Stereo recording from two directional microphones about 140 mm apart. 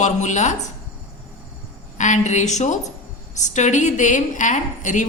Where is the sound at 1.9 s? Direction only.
60° left (ahead or behind).